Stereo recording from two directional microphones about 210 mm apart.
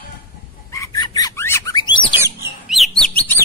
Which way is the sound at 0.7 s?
15° left (ahead or behind).